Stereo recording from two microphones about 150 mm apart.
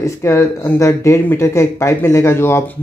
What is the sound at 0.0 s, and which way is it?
Speech, 20° left (ahead or behind).